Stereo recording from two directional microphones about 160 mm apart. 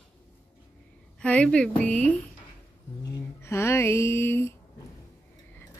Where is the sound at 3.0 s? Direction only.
20° left (ahead or behind).